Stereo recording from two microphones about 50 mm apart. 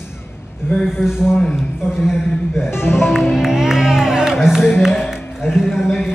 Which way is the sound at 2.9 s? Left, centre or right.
Centre.